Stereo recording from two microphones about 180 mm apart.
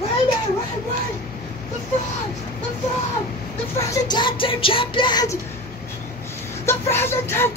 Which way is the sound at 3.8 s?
20° left (ahead or behind).